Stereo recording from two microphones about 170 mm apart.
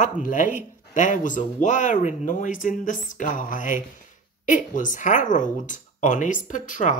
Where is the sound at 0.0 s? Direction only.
50° left (ahead or behind).